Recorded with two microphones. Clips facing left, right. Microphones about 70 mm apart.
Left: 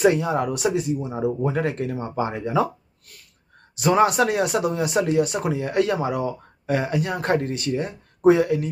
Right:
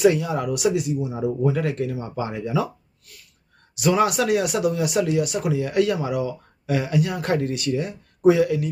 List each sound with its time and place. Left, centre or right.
0.0 s speech: left
3.8 s speech: left